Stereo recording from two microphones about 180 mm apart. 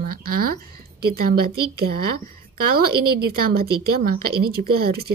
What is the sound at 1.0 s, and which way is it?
A woman's voice, 55° right (ahead or behind).